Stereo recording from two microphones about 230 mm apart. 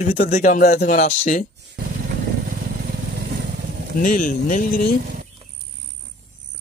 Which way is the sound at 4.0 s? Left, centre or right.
Left.